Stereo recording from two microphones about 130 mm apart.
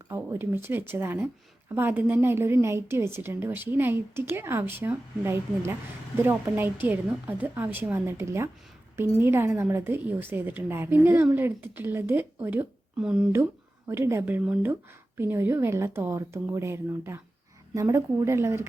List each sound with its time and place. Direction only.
0.1 s a woman's voice: 15° right (ahead or behind)
13.0 s speech: 5° right (ahead or behind)
13.3 s a woman's voice: 20° right (ahead or behind)